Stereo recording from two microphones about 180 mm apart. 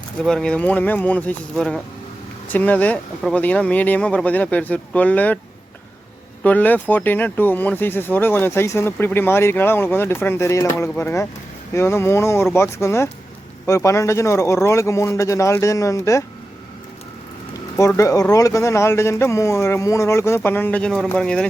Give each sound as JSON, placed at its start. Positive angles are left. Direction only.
{"t": 0.3, "sound": "speech", "side_deg": 5}
{"t": 6.4, "sound": "speech", "side_deg": 10}
{"t": 17.7, "sound": "speech", "side_deg": 15}